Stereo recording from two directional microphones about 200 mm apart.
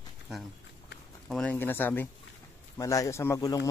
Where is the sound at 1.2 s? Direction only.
5° left (ahead or behind).